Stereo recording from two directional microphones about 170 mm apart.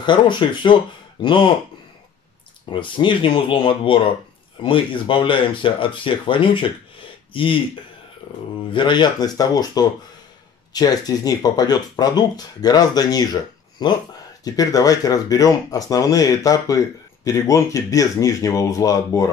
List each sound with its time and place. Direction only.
0.0 s speech: 25° left (ahead or behind)
2.7 s speech: 30° left (ahead or behind)
8.7 s speech: 25° left (ahead or behind)